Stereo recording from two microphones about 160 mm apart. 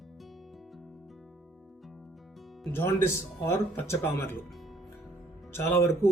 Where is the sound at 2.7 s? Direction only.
15° left (ahead or behind).